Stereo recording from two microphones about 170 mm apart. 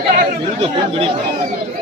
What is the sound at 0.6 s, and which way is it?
Speech, 35° right (ahead or behind).